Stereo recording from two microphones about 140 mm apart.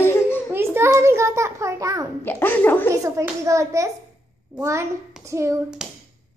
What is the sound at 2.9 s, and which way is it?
A child's voice, 20° right (ahead or behind).